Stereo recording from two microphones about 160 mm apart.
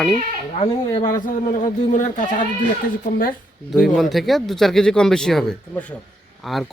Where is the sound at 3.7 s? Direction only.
Centre (ahead or behind).